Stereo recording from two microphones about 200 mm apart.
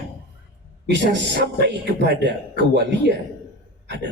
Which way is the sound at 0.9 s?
60° right (ahead or behind).